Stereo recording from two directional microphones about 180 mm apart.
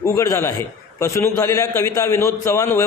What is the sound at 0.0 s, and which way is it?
A man's voice, 15° left (ahead or behind).